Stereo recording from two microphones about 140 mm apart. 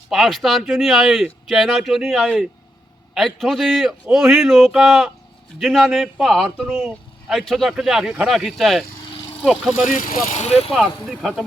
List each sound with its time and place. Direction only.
0.1 s speech: centre (ahead or behind)
9.9 s speech: 70° left (ahead or behind); by 10.7 s 50° left (ahead or behind)
10.7 s speech: 5° right (ahead or behind)